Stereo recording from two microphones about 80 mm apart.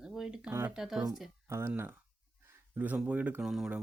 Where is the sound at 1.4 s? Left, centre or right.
Right.